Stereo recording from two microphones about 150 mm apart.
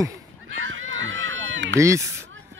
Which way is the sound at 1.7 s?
20° right (ahead or behind).